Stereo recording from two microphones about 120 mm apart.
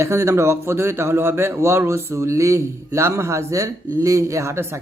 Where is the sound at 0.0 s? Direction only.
25° right (ahead or behind).